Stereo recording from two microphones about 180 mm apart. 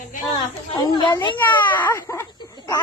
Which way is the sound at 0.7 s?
25° left (ahead or behind).